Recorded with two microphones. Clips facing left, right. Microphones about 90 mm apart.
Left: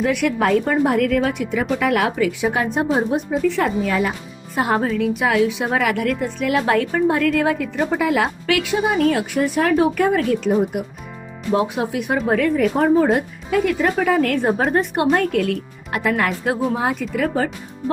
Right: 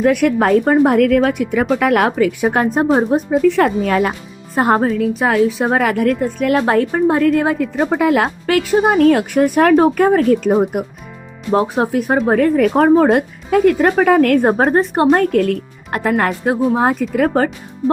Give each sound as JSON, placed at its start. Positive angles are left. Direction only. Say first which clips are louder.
{"t": 0.0, "sound": "speech", "louder": "right 5 dB", "side_deg": -50}
{"t": 3.4, "sound": "speech", "louder": "right 6 dB", "side_deg": -60}
{"t": 4.5, "sound": "a woman's voice", "louder": "right 5 dB", "side_deg": -40}
{"t": 7.9, "sound": "speech", "louder": "right 4 dB", "side_deg": -50}
{"t": 9.8, "sound": "speech", "louder": "right 5 dB", "side_deg": -40}
{"t": 11.5, "sound": "a woman's voice", "louder": "right 5 dB", "side_deg": -35}
{"t": 12.5, "sound": "speech", "louder": "right 5 dB", "side_deg": -55}
{"t": 14.7, "sound": "a woman's voice", "louder": "right 5 dB", "side_deg": -35}